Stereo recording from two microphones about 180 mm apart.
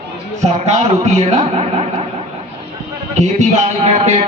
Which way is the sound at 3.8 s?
35° right (ahead or behind).